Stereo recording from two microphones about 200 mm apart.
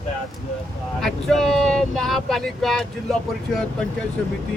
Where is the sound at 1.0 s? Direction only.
Centre (ahead or behind).